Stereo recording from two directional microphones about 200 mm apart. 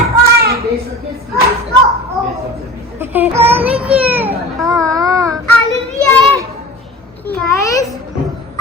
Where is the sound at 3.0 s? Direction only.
10° right (ahead or behind).